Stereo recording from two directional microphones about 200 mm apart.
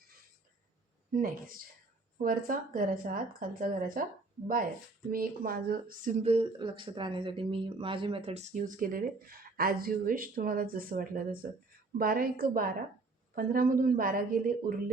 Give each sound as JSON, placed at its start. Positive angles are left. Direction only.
{"t": 1.1, "sound": "speech", "side_deg": -45}
{"t": 5.1, "sound": "speech", "side_deg": -45}
{"t": 6.2, "sound": "speech", "side_deg": -30}